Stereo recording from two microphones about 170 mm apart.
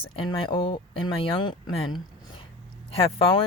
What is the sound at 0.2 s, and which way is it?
A woman's voice, 30° left (ahead or behind).